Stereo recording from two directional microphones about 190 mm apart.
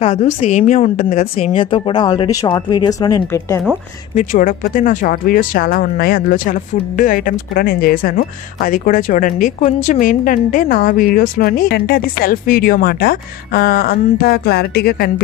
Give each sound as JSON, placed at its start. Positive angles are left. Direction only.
{"t": 0.0, "sound": "a woman's voice", "side_deg": 35}
{"t": 4.1, "sound": "speech", "side_deg": 40}